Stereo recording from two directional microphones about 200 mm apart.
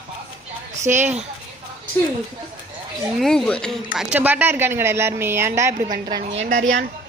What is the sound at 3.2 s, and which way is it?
Speech, centre (ahead or behind).